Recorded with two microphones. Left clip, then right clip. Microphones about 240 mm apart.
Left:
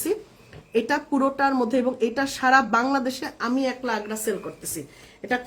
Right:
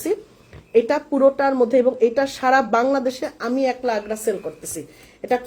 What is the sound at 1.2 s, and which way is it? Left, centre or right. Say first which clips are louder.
Speech: right 9 dB; centre.